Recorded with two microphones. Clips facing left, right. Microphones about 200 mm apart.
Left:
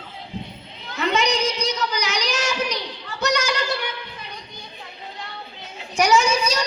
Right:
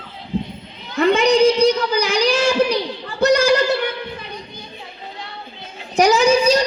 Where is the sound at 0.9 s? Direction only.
55° right (ahead or behind).